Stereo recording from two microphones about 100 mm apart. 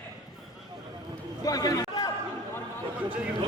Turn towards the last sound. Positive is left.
turn(degrees=-15)  # may be behind; listen again after turning